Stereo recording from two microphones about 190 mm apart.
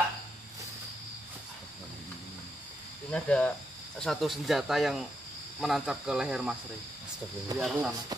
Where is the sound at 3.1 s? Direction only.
5° left (ahead or behind).